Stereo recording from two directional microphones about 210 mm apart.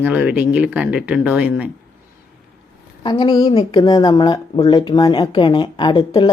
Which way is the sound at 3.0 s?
20° left (ahead or behind).